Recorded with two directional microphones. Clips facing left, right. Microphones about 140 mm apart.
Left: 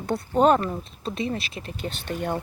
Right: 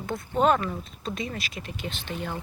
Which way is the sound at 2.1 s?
50° left (ahead or behind).